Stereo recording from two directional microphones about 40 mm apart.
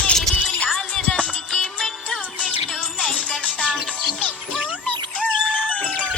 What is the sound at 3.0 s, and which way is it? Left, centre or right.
Music, left.